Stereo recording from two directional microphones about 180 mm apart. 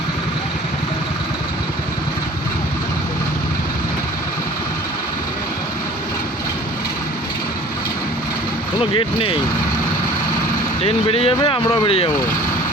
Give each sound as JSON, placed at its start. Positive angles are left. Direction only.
{"t": 8.8, "sound": "speech", "side_deg": 30}
{"t": 10.8, "sound": "speech", "side_deg": 30}